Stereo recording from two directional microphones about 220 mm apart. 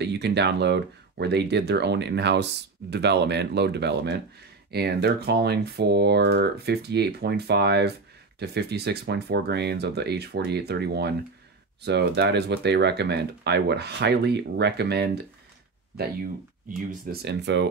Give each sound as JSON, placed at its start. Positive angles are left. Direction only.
{"t": 0.0, "sound": "speech", "side_deg": -50}
{"t": 17.0, "sound": "speech", "side_deg": -45}